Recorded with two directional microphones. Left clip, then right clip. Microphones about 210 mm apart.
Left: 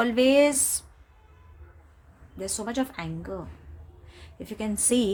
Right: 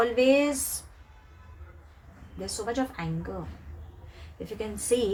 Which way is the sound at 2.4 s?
50° left (ahead or behind).